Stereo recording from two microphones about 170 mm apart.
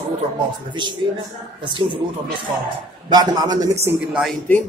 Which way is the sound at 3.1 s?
25° right (ahead or behind).